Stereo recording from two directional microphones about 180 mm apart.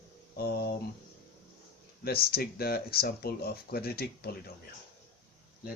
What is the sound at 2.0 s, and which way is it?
Speech, 60° left (ahead or behind).